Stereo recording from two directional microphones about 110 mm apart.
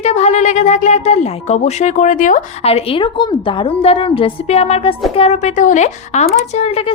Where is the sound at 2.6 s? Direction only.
60° left (ahead or behind).